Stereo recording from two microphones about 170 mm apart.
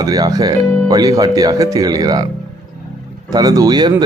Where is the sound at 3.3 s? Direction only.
20° right (ahead or behind).